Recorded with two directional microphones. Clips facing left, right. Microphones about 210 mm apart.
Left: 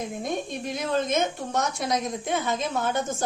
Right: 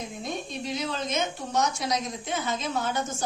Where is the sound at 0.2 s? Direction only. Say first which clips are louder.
Left 4 dB; 50° left (ahead or behind).